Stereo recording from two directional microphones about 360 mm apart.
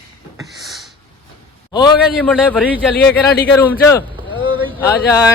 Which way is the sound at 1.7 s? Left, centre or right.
Centre.